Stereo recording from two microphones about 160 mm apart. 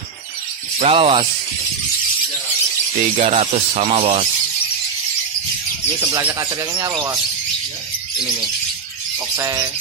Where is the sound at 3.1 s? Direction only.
40° right (ahead or behind).